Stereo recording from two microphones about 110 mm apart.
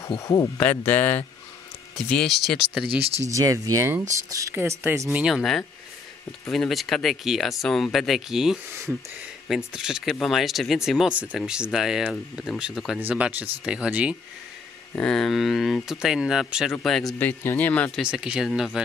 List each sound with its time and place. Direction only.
0.2 s speech: 30° left (ahead or behind)
0.6 s speech: 15° left (ahead or behind)
3.3 s speech: 30° right (ahead or behind)
5.1 s speech: 5° right (ahead or behind)
9.7 s speech: 5° right (ahead or behind)
15.0 s speech: 5° left (ahead or behind)
17.2 s speech: 20° left (ahead or behind)
18.0 s speech: 5° right (ahead or behind)